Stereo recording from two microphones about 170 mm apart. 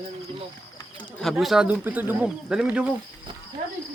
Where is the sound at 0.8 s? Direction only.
10° left (ahead or behind).